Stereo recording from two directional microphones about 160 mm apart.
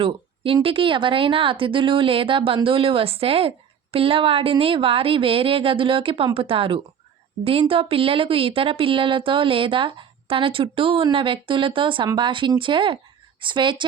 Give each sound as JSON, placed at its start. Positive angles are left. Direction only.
{"t": 0.0, "sound": "speech", "side_deg": -35}